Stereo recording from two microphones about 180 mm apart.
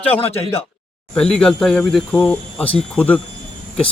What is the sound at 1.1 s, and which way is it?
Speech, 5° left (ahead or behind).